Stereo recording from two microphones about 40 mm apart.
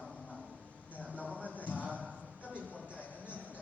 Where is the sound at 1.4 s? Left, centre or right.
Right.